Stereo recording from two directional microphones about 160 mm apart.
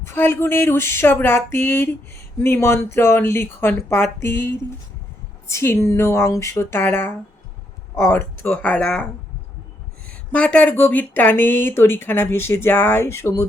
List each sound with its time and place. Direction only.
0.0 s speech: 15° left (ahead or behind)
10.3 s speech: 10° left (ahead or behind)